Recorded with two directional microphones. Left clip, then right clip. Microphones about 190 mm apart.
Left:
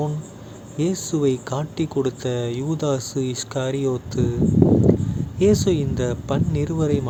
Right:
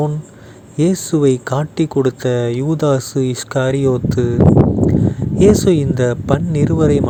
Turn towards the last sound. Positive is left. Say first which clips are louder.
# right 8 dB
turn(degrees=-35)  # may be behind; listen again after turning